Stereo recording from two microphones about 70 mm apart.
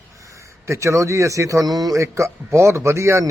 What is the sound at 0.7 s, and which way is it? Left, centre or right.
Speech, right.